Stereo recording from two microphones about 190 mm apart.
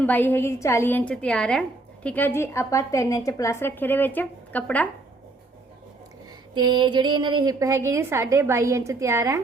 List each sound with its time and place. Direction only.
0.0 s a woman's voice: 10° left (ahead or behind)
6.5 s a woman's voice: 25° right (ahead or behind)